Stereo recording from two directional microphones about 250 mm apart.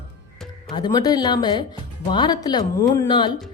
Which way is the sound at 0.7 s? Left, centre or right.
Centre.